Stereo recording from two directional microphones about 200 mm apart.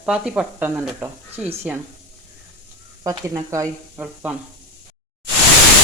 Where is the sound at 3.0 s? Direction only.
15° right (ahead or behind).